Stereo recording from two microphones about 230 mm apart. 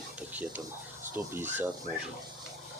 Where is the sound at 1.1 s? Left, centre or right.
Centre.